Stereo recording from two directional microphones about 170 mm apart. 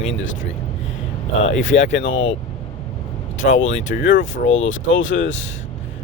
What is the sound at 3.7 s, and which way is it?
Speech, 50° left (ahead or behind).